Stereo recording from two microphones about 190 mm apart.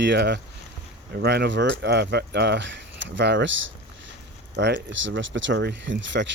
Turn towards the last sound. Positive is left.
turn(degrees=-70)  # may be behind; listen again after turning